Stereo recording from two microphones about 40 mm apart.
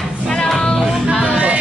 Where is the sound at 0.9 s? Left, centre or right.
Centre.